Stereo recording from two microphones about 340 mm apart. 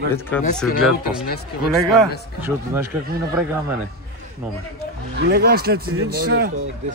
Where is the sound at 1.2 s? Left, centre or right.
Left.